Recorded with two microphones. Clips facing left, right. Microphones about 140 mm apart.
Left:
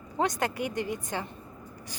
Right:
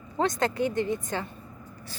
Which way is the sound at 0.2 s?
15° left (ahead or behind).